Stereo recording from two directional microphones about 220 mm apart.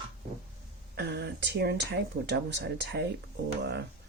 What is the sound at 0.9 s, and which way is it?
Speech, 45° right (ahead or behind).